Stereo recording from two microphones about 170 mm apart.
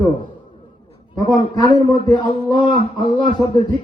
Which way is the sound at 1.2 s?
25° left (ahead or behind).